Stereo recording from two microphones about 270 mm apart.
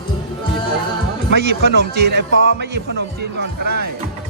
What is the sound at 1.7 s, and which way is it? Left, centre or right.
Speech, right.